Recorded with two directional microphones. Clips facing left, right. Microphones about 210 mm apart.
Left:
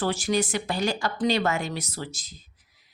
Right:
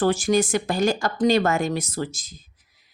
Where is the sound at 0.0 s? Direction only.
50° right (ahead or behind).